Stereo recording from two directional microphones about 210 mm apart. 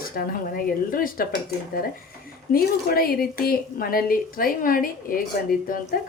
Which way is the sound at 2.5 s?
45° left (ahead or behind).